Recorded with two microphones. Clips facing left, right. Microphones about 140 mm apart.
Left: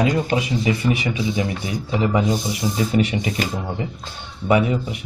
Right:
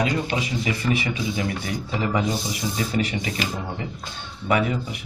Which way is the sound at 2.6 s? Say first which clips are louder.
Left 6 dB; 35° left (ahead or behind).